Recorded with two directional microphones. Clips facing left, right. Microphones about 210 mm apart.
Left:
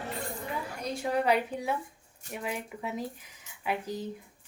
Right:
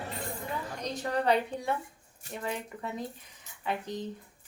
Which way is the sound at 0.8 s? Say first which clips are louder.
Left 1 dB; 10° left (ahead or behind).